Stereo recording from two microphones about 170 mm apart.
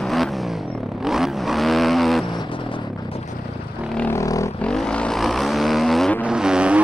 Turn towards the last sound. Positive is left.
turn(degrees=-5)  # may be behind; listen again after turning